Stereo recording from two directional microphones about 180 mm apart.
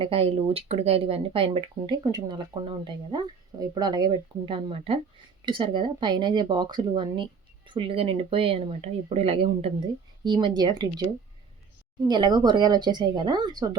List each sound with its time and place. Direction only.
0.0 s speech: 30° right (ahead or behind)
12.0 s speech: 25° right (ahead or behind)